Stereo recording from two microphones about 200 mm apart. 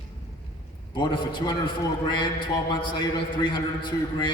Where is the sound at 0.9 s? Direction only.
20° left (ahead or behind).